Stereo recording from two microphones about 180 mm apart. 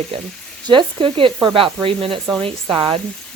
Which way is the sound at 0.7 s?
25° right (ahead or behind).